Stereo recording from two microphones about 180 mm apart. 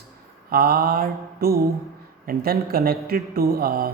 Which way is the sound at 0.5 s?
55° right (ahead or behind).